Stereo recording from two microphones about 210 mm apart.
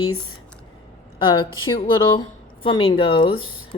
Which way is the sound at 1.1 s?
20° left (ahead or behind).